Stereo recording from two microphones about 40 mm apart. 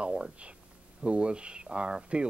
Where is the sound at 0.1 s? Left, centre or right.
Right.